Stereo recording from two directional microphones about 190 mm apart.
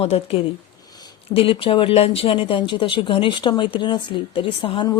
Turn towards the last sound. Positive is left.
turn(degrees=25)  # may be behind; listen again after turning